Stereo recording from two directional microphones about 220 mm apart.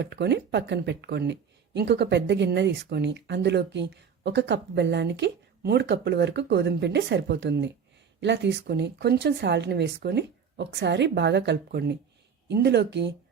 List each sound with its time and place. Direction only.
0.0 s speech: 50° right (ahead or behind)